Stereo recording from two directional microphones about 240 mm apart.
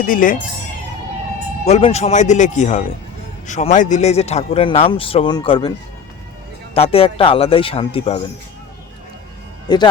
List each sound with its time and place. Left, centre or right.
0.0 s speech: left
1.6 s a man's voice: left
6.7 s a man's voice: left
9.6 s a man's voice: centre